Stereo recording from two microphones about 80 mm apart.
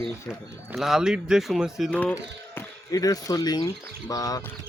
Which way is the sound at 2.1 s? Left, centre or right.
Left.